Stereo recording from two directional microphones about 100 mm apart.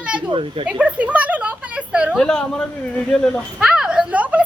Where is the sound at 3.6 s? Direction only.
10° right (ahead or behind).